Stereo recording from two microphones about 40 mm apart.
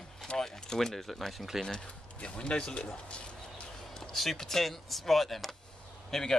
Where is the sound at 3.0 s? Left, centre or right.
Left.